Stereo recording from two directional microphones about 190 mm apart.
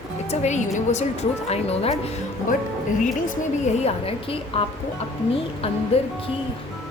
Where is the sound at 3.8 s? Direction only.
30° left (ahead or behind).